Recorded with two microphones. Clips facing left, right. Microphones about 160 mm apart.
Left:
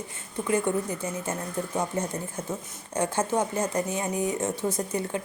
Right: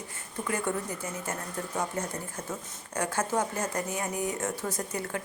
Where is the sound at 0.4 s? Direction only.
20° left (ahead or behind).